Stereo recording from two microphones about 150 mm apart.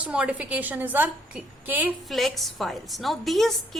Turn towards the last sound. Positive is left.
turn(degrees=0)  # may be behind; listen again after turning